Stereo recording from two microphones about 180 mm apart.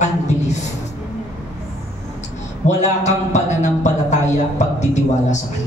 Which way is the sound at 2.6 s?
40° left (ahead or behind).